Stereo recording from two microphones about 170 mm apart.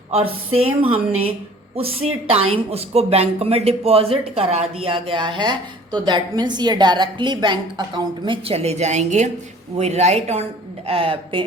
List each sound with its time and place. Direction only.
0.1 s speech: 35° right (ahead or behind)